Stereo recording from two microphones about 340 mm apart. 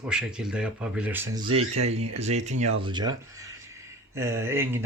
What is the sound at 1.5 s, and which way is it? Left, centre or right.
Speech, right.